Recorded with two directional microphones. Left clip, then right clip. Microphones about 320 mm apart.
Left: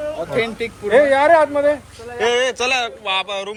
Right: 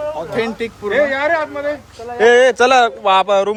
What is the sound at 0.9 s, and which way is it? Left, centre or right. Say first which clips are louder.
Speech: left 4 dB; centre.